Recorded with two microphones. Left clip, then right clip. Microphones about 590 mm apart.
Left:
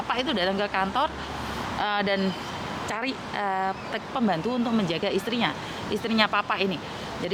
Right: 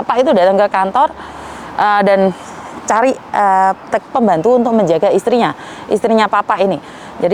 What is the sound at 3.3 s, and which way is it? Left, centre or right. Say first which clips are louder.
A woman's voice: right 15 dB; right.